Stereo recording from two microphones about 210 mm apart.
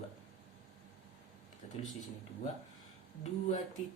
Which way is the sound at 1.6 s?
30° left (ahead or behind).